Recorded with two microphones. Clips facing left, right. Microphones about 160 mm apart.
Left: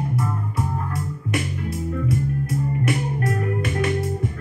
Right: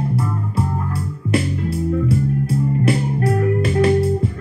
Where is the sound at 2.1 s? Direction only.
30° right (ahead or behind).